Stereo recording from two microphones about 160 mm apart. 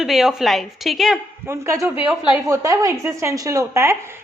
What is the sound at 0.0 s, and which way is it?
A woman's voice, centre (ahead or behind).